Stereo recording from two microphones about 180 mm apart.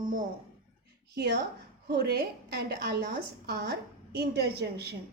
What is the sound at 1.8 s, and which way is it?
A woman's voice, 60° right (ahead or behind).